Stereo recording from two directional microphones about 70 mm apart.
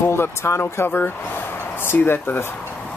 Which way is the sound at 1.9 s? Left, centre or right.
Left.